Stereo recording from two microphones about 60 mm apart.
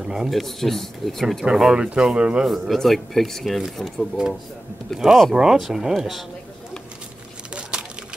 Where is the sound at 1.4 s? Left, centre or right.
Centre.